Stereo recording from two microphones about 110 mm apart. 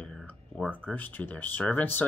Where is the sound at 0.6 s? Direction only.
15° right (ahead or behind).